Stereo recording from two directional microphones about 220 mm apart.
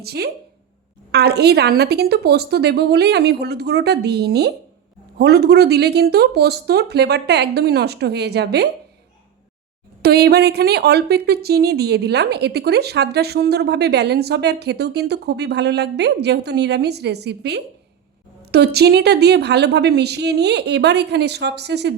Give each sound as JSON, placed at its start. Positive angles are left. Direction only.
{"t": 0.0, "sound": "speech", "side_deg": -45}
{"t": 10.0, "sound": "speech", "side_deg": -45}